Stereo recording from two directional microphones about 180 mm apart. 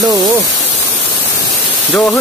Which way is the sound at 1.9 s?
5° left (ahead or behind).